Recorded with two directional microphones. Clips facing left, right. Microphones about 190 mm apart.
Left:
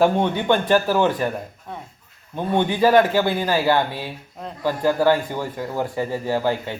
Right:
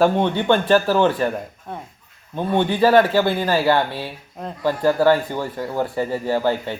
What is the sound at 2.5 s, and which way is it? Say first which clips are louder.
A man's voice: right 1 dB; 15° left (ahead or behind).